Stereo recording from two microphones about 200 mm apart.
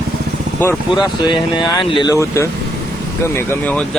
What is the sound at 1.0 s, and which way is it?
Speech, 25° left (ahead or behind).